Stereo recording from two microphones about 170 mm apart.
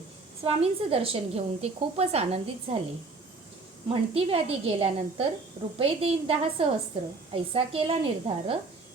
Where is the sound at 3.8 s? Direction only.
35° right (ahead or behind).